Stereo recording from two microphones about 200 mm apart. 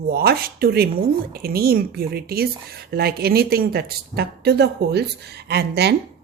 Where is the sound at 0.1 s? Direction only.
50° right (ahead or behind).